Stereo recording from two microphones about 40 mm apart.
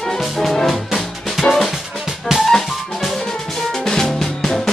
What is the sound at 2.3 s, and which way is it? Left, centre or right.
Music, centre.